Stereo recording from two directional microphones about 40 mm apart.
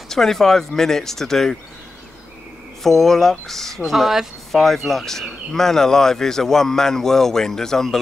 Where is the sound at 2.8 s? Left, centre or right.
Centre.